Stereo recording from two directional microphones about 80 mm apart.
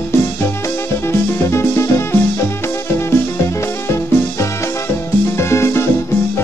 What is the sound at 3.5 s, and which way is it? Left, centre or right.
Music, left.